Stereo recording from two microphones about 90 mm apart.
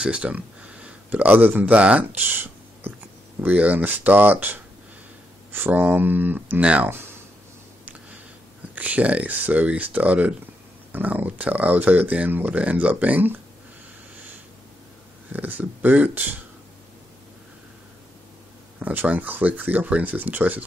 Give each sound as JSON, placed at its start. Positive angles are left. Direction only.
{"t": 0.0, "sound": "a man's voice", "side_deg": -10}
{"t": 8.7, "sound": "speech", "side_deg": -15}
{"t": 15.3, "sound": "speech", "side_deg": -20}
{"t": 18.8, "sound": "speech", "side_deg": -20}